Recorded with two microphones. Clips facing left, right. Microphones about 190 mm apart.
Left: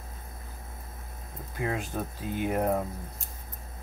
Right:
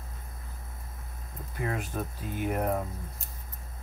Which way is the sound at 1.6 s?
15° left (ahead or behind).